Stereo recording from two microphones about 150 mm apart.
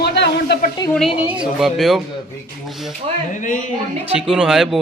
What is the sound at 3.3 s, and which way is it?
Speech, 60° left (ahead or behind).